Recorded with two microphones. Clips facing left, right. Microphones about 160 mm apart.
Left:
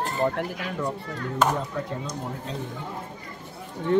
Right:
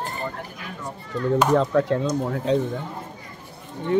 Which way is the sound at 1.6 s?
80° right.